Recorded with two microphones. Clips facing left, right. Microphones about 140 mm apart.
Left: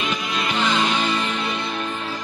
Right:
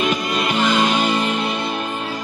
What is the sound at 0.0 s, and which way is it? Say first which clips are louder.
Music: right 5 dB; 40° right (ahead or behind).